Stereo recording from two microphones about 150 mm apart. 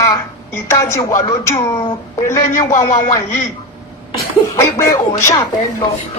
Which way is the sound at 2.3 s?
20° left (ahead or behind).